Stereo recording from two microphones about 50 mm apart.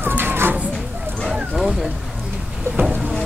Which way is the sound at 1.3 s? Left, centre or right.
Centre.